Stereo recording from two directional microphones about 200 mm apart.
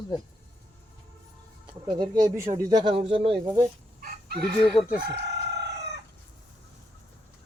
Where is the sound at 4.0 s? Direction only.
50° right (ahead or behind).